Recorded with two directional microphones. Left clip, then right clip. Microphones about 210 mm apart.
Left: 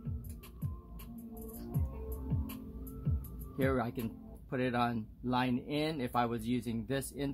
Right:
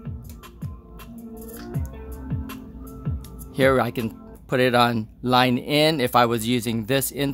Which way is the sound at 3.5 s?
45° right (ahead or behind).